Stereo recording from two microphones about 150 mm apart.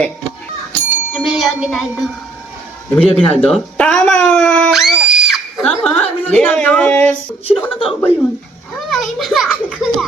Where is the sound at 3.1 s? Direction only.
45° left (ahead or behind).